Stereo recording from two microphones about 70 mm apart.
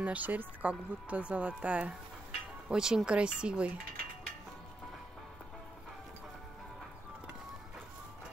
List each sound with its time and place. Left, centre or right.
0.0 s speech: right